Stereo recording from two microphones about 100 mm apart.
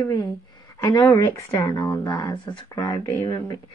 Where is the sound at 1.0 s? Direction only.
40° left (ahead or behind).